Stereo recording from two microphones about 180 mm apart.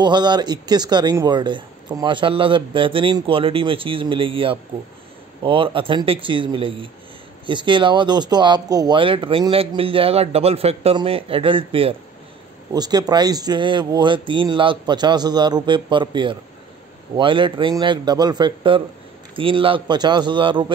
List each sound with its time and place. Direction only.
0.0 s speech: 25° right (ahead or behind)